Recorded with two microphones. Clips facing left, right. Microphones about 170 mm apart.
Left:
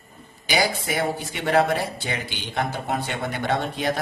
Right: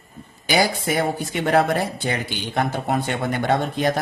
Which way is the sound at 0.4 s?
50° right (ahead or behind).